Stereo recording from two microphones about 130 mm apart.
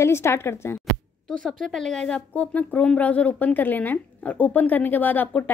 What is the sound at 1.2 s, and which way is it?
Speech, 5° left (ahead or behind).